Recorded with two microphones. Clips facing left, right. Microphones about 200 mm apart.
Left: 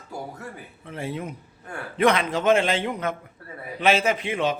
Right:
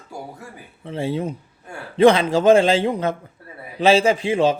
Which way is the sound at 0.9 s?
30° right (ahead or behind).